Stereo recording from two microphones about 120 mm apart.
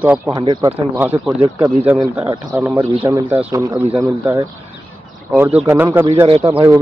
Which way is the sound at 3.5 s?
25° right (ahead or behind).